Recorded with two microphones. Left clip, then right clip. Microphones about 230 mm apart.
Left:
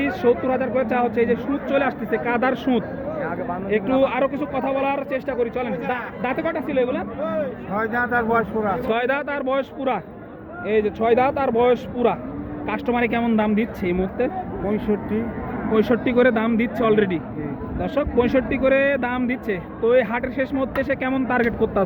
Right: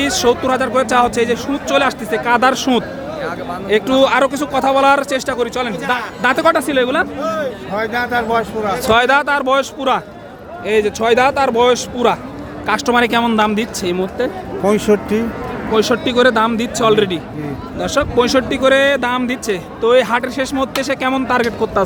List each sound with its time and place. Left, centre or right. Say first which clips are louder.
0.0 s a man's voice: right 5 dB; right
7.2 s speech: right 5 dB; right
7.8 s a man's voice: right 4 dB; centre
8.8 s speech: right 10 dB; right
14.6 s speech: right 12 dB; right
15.7 s a man's voice: right 5 dB; centre